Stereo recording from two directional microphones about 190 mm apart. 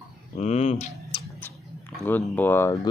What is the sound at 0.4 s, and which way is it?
Speech, 35° left (ahead or behind).